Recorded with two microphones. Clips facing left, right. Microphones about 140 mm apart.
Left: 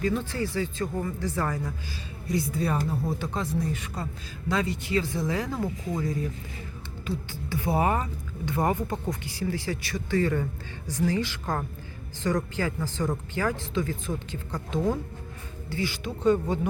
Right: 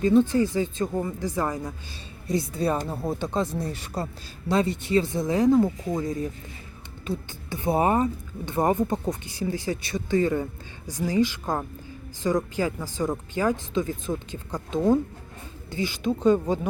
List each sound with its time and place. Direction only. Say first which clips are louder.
0.0 s speech: right 8 dB; 25° right (ahead or behind)
2.3 s speech: right 2 dB; 25° right (ahead or behind)
7.5 s speech: right 3 dB; 20° right (ahead or behind)
15.7 s speech: right 5 dB; 20° right (ahead or behind)